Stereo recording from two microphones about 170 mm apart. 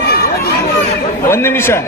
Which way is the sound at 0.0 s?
65° left (ahead or behind).